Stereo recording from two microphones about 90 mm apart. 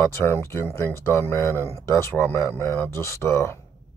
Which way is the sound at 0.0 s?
30° left (ahead or behind).